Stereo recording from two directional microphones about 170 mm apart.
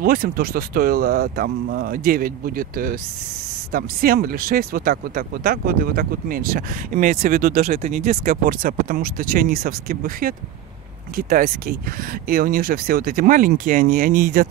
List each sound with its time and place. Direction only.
0.0 s speech: 60° right (ahead or behind)
7.7 s speech: 40° right (ahead or behind); by 14.5 s 55° right (ahead or behind)